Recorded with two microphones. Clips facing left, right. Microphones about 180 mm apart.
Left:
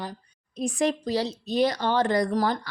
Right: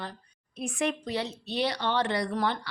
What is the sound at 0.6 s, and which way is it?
Speech, 35° left (ahead or behind).